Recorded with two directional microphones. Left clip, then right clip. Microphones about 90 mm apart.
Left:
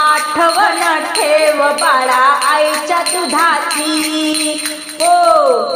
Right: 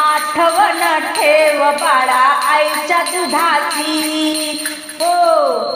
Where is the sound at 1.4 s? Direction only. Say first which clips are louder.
Left 1 dB; 30° left (ahead or behind).